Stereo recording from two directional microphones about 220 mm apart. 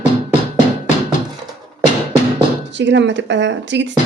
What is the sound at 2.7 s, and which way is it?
Speech, 55° right (ahead or behind).